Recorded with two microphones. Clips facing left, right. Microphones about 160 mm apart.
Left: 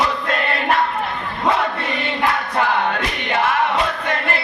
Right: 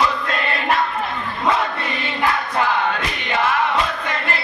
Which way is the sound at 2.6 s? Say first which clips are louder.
Left 1 dB; 60° left (ahead or behind).